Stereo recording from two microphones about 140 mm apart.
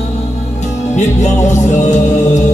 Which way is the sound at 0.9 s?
55° left (ahead or behind).